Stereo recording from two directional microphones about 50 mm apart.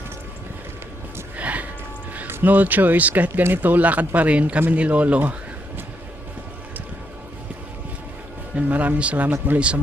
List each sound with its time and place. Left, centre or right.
1.4 s a sound: right
2.4 s speech: right
8.7 s speech: right